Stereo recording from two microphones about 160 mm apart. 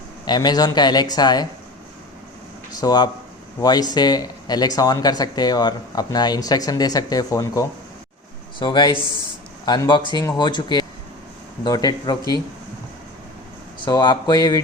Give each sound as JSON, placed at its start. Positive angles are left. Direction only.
{"t": 0.3, "sound": "speech", "side_deg": 25}
{"t": 2.7, "sound": "speech", "side_deg": 25}
{"t": 13.8, "sound": "speech", "side_deg": 30}